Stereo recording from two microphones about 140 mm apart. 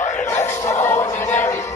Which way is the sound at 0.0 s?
65° left (ahead or behind).